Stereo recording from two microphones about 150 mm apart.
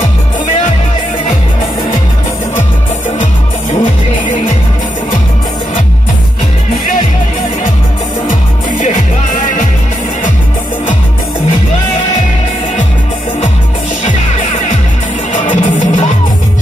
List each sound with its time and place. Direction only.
8.3 s music: 60° left (ahead or behind)
15.3 s music: 60° left (ahead or behind)